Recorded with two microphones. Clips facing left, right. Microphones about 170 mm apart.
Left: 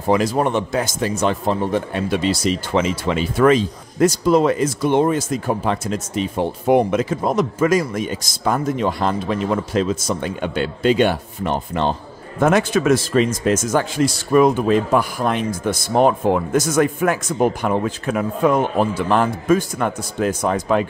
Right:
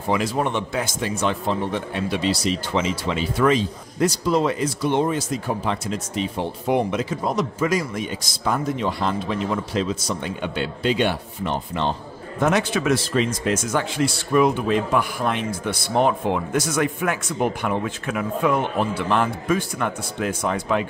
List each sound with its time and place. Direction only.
0.1 s speech: 40° left (ahead or behind)